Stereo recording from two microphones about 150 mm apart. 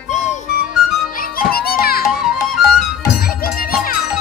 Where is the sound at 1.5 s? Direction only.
85° left.